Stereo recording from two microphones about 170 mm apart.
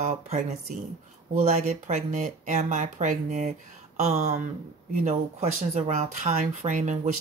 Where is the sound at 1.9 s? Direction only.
50° right (ahead or behind).